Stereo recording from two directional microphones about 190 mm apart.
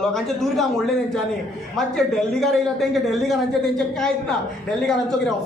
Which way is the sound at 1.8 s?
Centre (ahead or behind).